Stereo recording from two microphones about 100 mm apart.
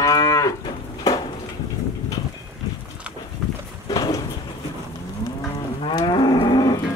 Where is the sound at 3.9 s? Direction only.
40° left (ahead or behind).